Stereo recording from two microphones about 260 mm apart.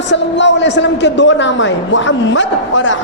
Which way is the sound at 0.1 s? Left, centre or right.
Left.